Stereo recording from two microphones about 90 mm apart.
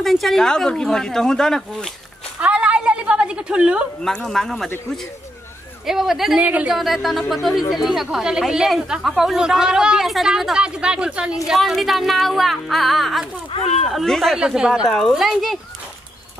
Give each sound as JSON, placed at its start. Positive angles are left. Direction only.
{"t": 0.0, "sound": "speech", "side_deg": 0}
{"t": 2.4, "sound": "a woman's voice", "side_deg": -10}
{"t": 4.0, "sound": "speech", "side_deg": 5}
{"t": 5.9, "sound": "speech", "side_deg": -5}
{"t": 6.4, "sound": "speech", "side_deg": -15}
{"t": 6.7, "sound": "speech", "side_deg": 0}
{"t": 14.4, "sound": "speech", "side_deg": -5}